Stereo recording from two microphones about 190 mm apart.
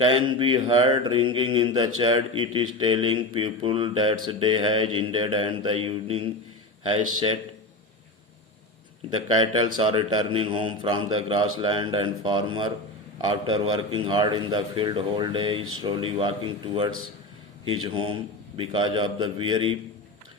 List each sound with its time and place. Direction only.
0.0 s speech: 25° right (ahead or behind)
9.0 s speech: 25° right (ahead or behind)